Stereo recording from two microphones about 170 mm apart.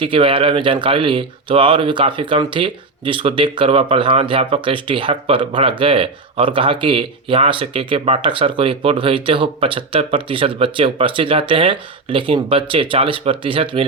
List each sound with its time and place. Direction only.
0.0 s speech: 30° right (ahead or behind)